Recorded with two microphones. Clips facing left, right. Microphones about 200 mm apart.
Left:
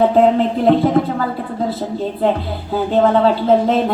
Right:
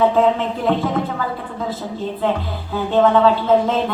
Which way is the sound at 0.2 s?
40° left (ahead or behind).